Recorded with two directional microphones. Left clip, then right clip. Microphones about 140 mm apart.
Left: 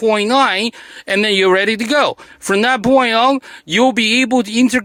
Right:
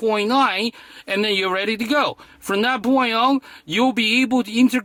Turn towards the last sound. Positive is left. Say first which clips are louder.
# left 5 dB
turn(degrees=35)  # may be behind; listen again after turning